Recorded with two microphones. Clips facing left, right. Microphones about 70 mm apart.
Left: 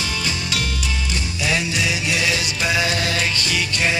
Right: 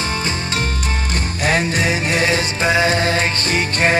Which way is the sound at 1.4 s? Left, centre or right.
Right.